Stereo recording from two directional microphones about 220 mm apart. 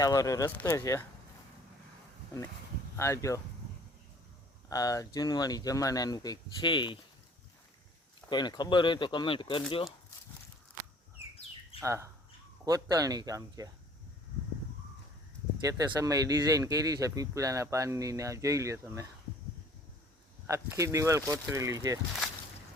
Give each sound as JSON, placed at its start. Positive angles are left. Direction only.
{"t": 0.0, "sound": "speech", "side_deg": 15}
{"t": 2.9, "sound": "speech", "side_deg": 10}
{"t": 4.7, "sound": "speech", "side_deg": 15}
{"t": 8.3, "sound": "speech", "side_deg": 20}
{"t": 11.8, "sound": "speech", "side_deg": -10}
{"t": 15.6, "sound": "speech", "side_deg": -15}
{"t": 20.5, "sound": "speech", "side_deg": -15}